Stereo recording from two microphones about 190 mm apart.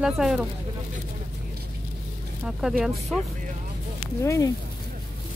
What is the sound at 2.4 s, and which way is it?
Speech, 5° right (ahead or behind).